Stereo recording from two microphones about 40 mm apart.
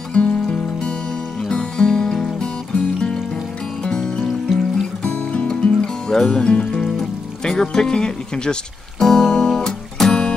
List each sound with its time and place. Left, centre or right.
0.1 s music: left; by 2.5 s centre
2.7 s music: left
4.2 s music: centre
5.0 s music: left
6.1 s speech: centre
9.0 s music: centre